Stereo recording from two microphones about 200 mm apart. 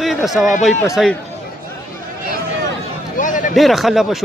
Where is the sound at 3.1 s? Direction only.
40° left (ahead or behind).